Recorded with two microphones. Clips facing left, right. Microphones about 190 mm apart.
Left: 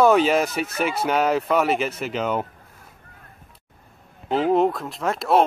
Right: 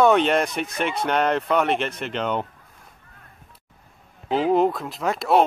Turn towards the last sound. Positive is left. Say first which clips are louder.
# even
turn(degrees=0)  # may be behind; listen again after turning